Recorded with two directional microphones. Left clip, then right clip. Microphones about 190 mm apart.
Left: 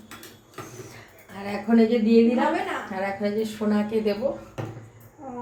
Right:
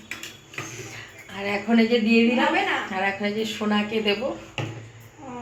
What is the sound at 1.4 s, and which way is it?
Speech, centre (ahead or behind).